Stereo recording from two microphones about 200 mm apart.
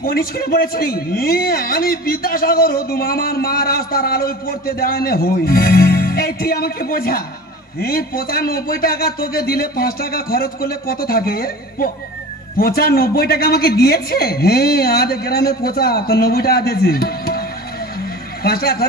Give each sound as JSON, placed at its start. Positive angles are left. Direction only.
{"t": 0.0, "sound": "a man's voice", "side_deg": 45}